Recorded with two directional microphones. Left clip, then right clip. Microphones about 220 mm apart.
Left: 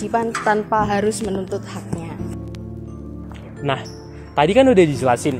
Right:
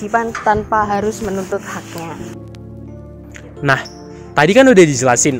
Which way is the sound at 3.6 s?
45° right (ahead or behind).